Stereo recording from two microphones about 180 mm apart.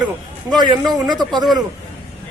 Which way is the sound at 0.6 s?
20° right (ahead or behind).